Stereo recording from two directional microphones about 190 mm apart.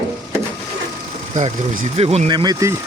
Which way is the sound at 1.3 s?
40° right (ahead or behind).